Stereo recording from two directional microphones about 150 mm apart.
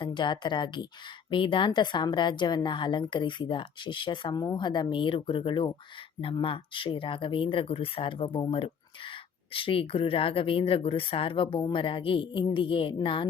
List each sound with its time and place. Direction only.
0.0 s speech: 30° left (ahead or behind)